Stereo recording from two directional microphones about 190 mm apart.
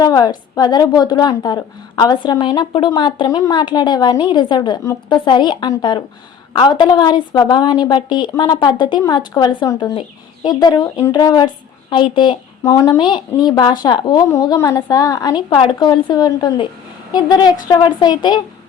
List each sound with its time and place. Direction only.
0.0 s a woman's voice: 20° left (ahead or behind)